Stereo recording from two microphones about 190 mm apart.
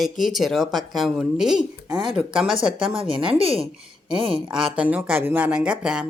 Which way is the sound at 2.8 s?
30° right (ahead or behind).